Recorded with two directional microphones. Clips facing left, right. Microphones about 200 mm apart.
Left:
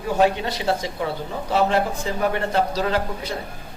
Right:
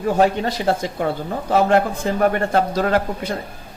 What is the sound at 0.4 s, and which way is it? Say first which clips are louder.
Speech: right 3 dB; 45° right (ahead or behind).